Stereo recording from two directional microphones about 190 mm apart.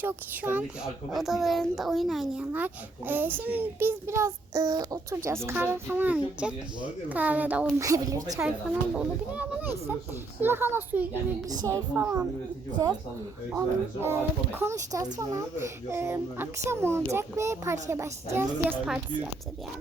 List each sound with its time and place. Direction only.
0.0 s a child's voice: 10° right (ahead or behind)
8.4 s a child's voice: 5° right (ahead or behind)
13.6 s a child's voice: 15° right (ahead or behind)